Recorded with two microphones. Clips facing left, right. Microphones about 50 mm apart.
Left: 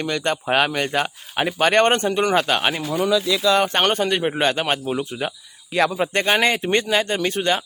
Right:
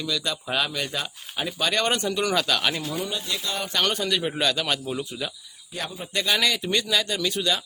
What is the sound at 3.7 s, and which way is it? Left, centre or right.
A man's voice, left.